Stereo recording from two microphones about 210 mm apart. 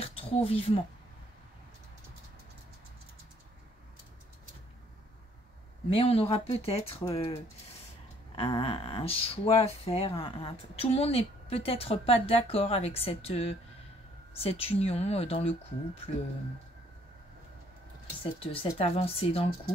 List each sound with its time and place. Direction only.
0.0 s a sound: 25° left (ahead or behind)
5.9 s speech: 25° left (ahead or behind)
18.2 s speech: 25° left (ahead or behind)